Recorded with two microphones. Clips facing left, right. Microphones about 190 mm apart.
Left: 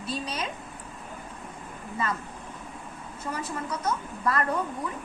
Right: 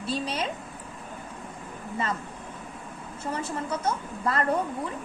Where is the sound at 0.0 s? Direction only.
30° right (ahead or behind).